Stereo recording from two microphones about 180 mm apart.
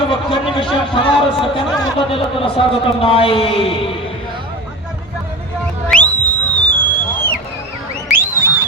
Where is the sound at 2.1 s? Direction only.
30° left (ahead or behind).